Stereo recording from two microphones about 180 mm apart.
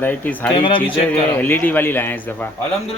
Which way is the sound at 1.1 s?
10° left (ahead or behind).